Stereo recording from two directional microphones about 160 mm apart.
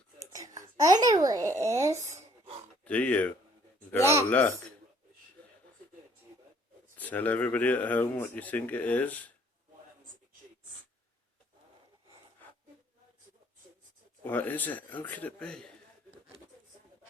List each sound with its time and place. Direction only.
0.2 s a child's voice: 20° right (ahead or behind)
2.8 s speech: 10° left (ahead or behind)
4.0 s speech: 15° right (ahead or behind)
4.3 s speech: 10° left (ahead or behind)
6.9 s speech: 10° left (ahead or behind)
14.3 s speech: 10° left (ahead or behind)